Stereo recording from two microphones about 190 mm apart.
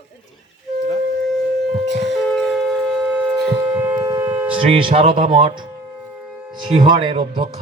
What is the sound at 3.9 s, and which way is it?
Civil defense siren, 10° right (ahead or behind).